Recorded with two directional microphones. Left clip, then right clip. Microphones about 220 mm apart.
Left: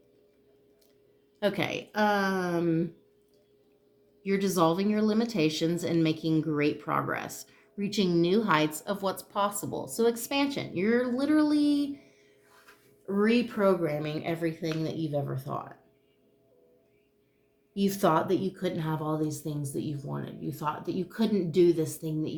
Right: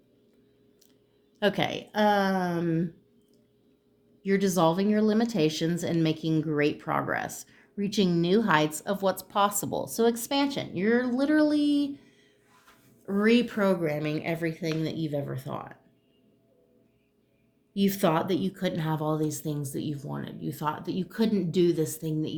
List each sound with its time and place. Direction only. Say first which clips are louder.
1.4 s a woman's voice: right 2 dB; 35° right (ahead or behind)
4.2 s speech: right 2 dB; 30° right (ahead or behind)
13.1 s speech: right 2 dB; 40° right (ahead or behind)
17.7 s speech: even; 40° right (ahead or behind)